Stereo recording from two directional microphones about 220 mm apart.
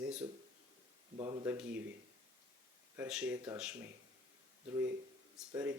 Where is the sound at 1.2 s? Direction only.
15° right (ahead or behind).